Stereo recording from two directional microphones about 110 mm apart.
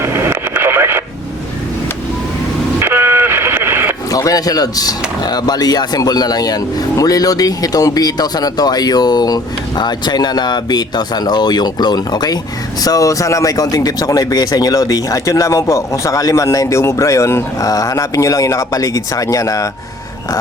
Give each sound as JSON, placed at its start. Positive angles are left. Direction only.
{"t": 0.0, "sound": "radio", "side_deg": -20}
{"t": 2.8, "sound": "vehicle", "side_deg": -20}
{"t": 4.1, "sound": "speech", "side_deg": 35}